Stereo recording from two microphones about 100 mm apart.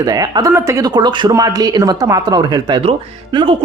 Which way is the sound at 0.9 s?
50° right (ahead or behind).